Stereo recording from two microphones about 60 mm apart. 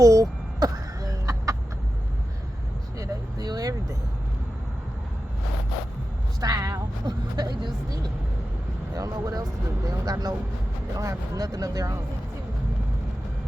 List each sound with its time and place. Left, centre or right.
0.0 s a sound: right
3.0 s vehicle: right
6.4 s vehicle: right
9.8 s speech: right